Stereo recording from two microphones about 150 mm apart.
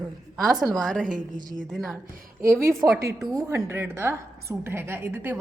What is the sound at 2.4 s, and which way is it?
A woman's voice, 20° right (ahead or behind).